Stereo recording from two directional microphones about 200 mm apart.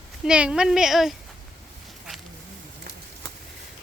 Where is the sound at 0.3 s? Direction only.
5° right (ahead or behind).